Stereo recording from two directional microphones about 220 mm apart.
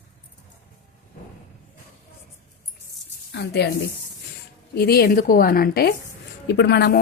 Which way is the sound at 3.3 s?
50° left (ahead or behind).